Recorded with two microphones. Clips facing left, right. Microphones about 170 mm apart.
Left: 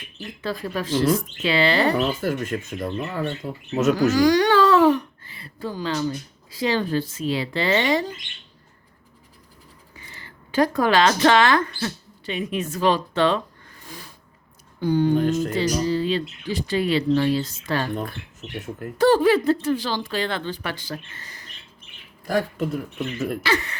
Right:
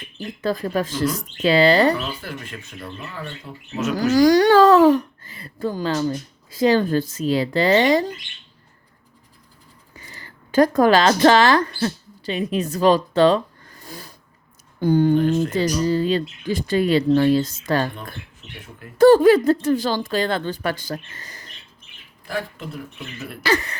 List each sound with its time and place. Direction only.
0.4 s speech: 45° right (ahead or behind)
2.0 s speech: 45° left (ahead or behind)
4.1 s speech: 40° right (ahead or behind)
10.1 s a woman's voice: 40° right (ahead or behind)
17.9 s speech: 45° left (ahead or behind)
18.9 s a woman's voice: 45° right (ahead or behind)
22.3 s speech: 45° left (ahead or behind)
23.4 s speech: 40° right (ahead or behind)